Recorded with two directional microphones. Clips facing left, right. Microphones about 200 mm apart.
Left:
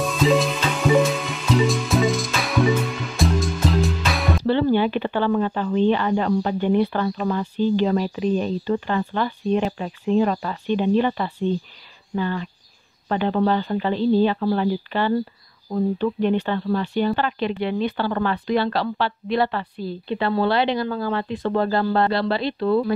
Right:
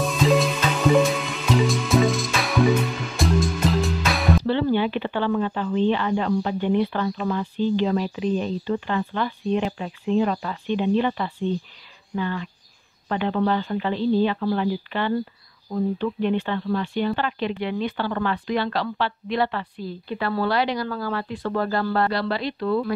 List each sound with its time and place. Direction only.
0.0 s music: centre (ahead or behind)
4.5 s speech: 40° left (ahead or behind)